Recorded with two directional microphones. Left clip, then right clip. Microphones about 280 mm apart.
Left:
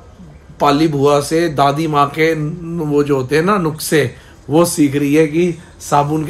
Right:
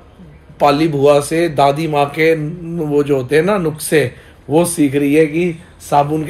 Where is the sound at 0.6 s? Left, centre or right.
Centre.